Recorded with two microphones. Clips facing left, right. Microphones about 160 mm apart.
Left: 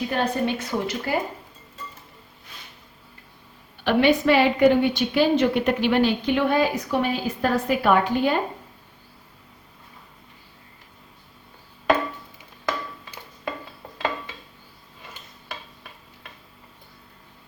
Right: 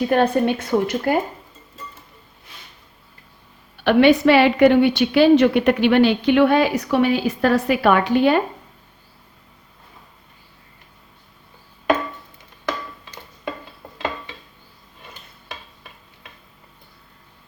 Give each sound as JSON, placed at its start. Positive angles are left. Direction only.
{"t": 0.0, "sound": "a woman's voice", "side_deg": -55}
{"t": 3.8, "sound": "a woman's voice", "side_deg": -75}
{"t": 12.6, "sound": "a sound", "side_deg": 0}